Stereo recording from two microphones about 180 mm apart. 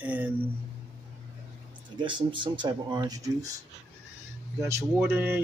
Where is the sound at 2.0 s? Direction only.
25° right (ahead or behind).